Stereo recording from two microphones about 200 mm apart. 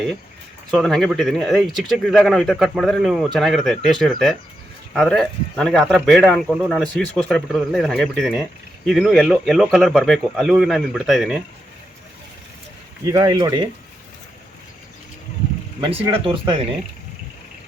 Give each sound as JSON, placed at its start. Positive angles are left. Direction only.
{"t": 0.7, "sound": "speech", "side_deg": 0}
{"t": 13.1, "sound": "speech", "side_deg": -20}
{"t": 15.8, "sound": "speech", "side_deg": -25}